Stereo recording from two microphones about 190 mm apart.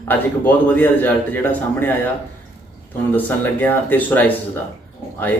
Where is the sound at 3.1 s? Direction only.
10° left (ahead or behind).